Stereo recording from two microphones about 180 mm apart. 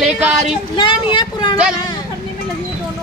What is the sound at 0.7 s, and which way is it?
Speech, 25° left (ahead or behind).